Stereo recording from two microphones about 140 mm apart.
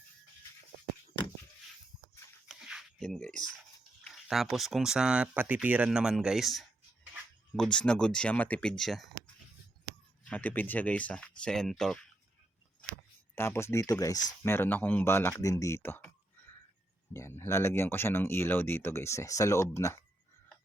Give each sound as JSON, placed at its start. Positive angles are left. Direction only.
{"t": 2.5, "sound": "a sound", "side_deg": -5}
{"t": 4.0, "sound": "speech", "side_deg": 0}
{"t": 10.2, "sound": "speech", "side_deg": 10}
{"t": 13.3, "sound": "speech", "side_deg": 15}
{"t": 14.5, "sound": "speech", "side_deg": 15}
{"t": 17.2, "sound": "speech", "side_deg": 20}